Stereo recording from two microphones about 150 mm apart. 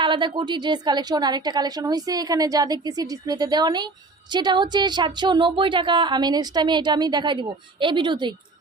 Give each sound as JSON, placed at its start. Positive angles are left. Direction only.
{"t": 0.0, "sound": "a woman's voice", "side_deg": -30}